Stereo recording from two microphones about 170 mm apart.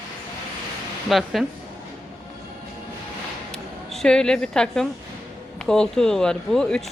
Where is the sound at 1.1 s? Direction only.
Centre (ahead or behind).